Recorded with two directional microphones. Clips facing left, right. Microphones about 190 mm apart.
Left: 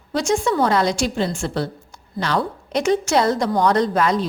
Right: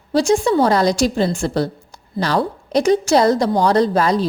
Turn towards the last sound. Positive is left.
turn(degrees=-35)  # may be behind; listen again after turning